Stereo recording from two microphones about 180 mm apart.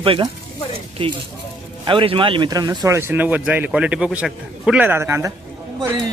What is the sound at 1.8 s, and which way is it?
A man's voice, 30° right (ahead or behind).